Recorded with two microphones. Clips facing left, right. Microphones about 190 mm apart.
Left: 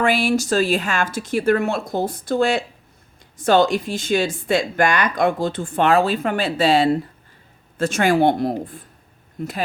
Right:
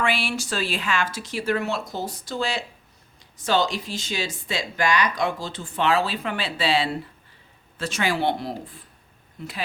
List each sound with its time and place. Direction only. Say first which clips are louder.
0.0 s speech: left 7 dB; 45° left (ahead or behind)